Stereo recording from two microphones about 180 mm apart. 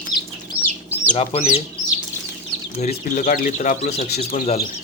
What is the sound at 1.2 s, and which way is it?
Speech, 35° left (ahead or behind).